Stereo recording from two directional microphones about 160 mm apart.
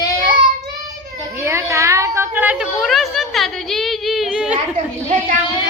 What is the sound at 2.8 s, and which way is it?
A woman's voice, centre (ahead or behind).